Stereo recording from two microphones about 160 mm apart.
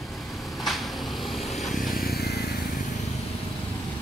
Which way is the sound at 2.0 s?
75° left (ahead or behind).